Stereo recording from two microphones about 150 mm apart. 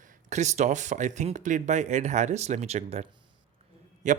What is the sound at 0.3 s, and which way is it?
Speech, 50° right (ahead or behind).